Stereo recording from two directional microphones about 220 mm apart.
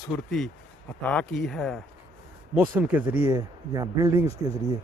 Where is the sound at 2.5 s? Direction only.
15° right (ahead or behind).